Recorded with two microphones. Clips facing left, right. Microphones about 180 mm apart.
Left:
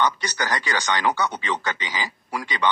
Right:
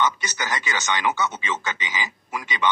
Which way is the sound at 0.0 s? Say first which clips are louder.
Left 1 dB; 20° right (ahead or behind).